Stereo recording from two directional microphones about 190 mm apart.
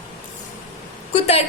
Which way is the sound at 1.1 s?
35° left (ahead or behind).